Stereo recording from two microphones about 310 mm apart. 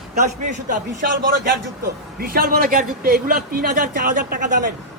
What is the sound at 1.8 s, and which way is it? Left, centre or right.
A man's voice, right.